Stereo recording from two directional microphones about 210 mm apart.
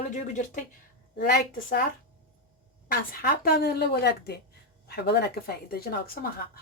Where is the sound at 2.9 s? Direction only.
45° left (ahead or behind).